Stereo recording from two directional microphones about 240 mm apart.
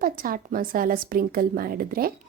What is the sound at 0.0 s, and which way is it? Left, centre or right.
A woman's voice, right.